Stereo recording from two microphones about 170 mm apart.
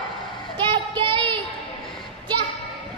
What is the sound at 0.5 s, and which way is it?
Child singing, 30° right (ahead or behind).